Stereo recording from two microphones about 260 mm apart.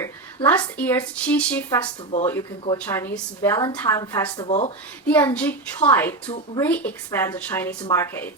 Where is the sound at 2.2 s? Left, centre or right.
Centre.